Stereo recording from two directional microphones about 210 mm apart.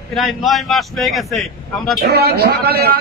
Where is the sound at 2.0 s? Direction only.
50° right (ahead or behind).